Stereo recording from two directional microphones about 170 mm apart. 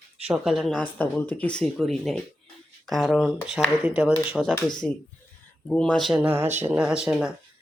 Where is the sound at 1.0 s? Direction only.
10° left (ahead or behind).